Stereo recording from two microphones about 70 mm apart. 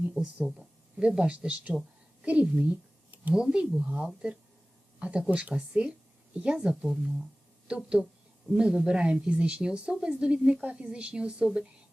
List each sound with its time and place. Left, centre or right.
0.4 s speech: centre
2.2 s a sound: centre
3.3 s a woman's voice: centre
6.8 s speech: centre
7.7 s a woman's voice: centre